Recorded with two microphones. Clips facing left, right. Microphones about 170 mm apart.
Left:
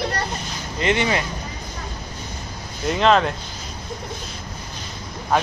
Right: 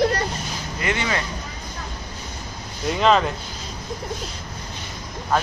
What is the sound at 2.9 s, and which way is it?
Speech, centre (ahead or behind).